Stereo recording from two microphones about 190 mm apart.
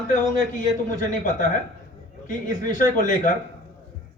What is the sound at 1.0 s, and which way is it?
A man's voice, 45° left (ahead or behind).